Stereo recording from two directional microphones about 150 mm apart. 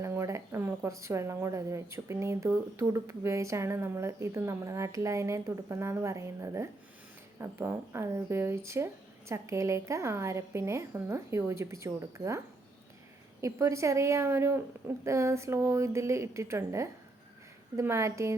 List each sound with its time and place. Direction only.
0.0 s a woman's voice: 20° right (ahead or behind)
13.4 s a woman's voice: 20° right (ahead or behind)